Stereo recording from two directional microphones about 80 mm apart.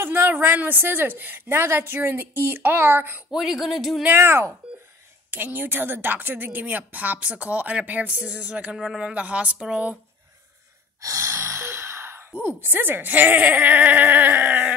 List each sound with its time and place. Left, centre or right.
0.0 s a woman's voice: right
3.3 s speech: centre
4.0 s a woman's voice: right
11.0 s speech: right; by 14.7 s centre